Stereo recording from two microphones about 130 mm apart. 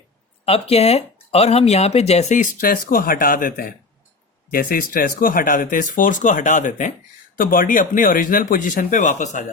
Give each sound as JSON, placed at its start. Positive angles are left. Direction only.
{"t": 0.4, "sound": "speech", "side_deg": 50}
{"t": 7.3, "sound": "speech", "side_deg": 90}